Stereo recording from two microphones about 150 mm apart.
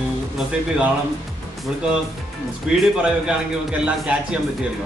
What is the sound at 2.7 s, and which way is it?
A woman's voice, 5° right (ahead or behind).